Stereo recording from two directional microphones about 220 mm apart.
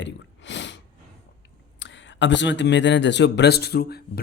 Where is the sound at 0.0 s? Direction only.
55° left (ahead or behind).